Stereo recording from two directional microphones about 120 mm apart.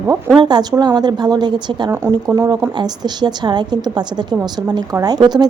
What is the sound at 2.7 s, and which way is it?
A woman's voice, 35° right (ahead or behind).